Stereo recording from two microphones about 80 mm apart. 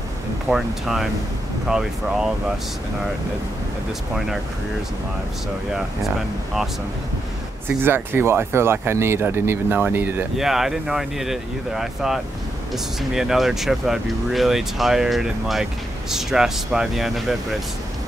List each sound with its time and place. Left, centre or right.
0.5 s speech: centre
6.0 s speech: centre
7.6 s speech: right
10.3 s speech: centre